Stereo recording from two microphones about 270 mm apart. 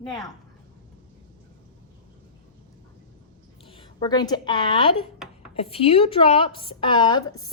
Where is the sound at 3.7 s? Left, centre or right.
Centre.